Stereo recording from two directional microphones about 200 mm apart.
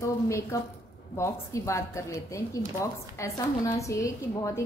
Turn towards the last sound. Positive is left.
turn(degrees=15)  # may be behind; listen again after turning